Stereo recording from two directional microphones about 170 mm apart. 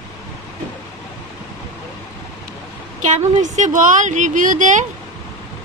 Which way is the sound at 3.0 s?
45° right (ahead or behind).